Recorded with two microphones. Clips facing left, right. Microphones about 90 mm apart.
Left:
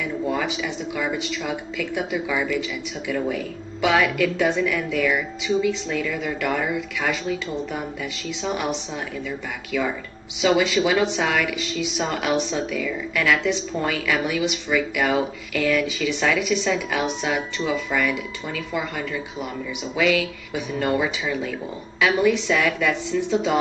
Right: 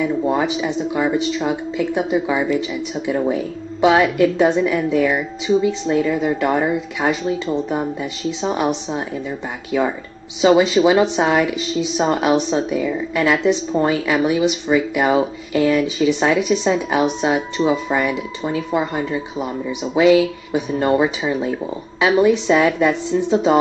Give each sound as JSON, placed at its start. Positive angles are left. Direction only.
{"t": 0.0, "sound": "a woman's voice", "side_deg": -30}